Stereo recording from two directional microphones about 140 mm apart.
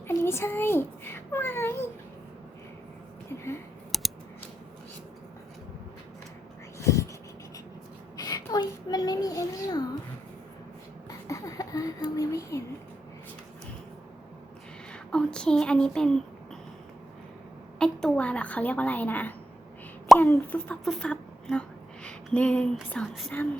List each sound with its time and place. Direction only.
0.1 s a child's voice: 20° left (ahead or behind)
3.9 s typing: centre (ahead or behind)
6.7 s a sound: 20° left (ahead or behind)
8.1 s a sound: 25° left (ahead or behind)
11.3 s a sound: 25° left (ahead or behind)
14.9 s speech: 5° left (ahead or behind)
17.7 s a child's voice: 5° left (ahead or behind)
20.1 s plop: centre (ahead or behind)
20.5 s speech: 5° left (ahead or behind)